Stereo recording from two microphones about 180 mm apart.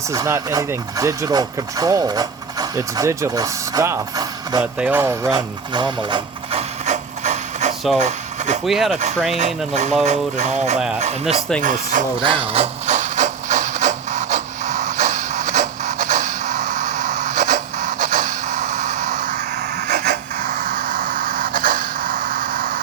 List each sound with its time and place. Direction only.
0.1 s speech: 15° right (ahead or behind)
4.6 s a sound: 10° right (ahead or behind); by 8.5 s 40° right (ahead or behind)
8.6 s speech: centre (ahead or behind)
9.0 s mantra: 40° right (ahead or behind)
10.8 s speech: 5° right (ahead or behind)
11.0 s mantra: 35° right (ahead or behind)
11.6 s speech: 45° right (ahead or behind)
12.2 s speech: 30° right (ahead or behind)
12.9 s printer: 40° right (ahead or behind)
19.9 s rub: 55° right (ahead or behind)